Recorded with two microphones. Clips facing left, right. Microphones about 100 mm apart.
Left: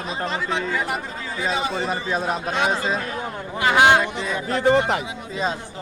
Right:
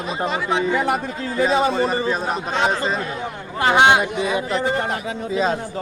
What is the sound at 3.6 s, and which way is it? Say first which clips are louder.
Speech: right 1 dB; 25° right (ahead or behind).